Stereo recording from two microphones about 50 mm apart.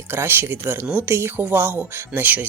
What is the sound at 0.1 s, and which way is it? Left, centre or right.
Speech, right.